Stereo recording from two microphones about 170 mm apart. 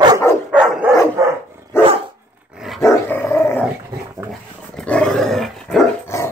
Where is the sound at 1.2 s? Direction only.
20° right (ahead or behind).